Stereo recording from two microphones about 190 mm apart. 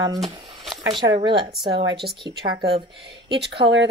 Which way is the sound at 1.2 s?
25° right (ahead or behind).